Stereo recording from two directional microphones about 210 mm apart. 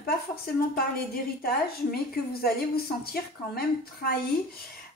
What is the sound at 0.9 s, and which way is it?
Speech, 45° left (ahead or behind).